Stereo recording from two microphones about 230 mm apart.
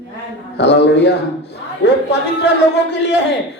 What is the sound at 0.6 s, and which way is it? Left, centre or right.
Speech, left.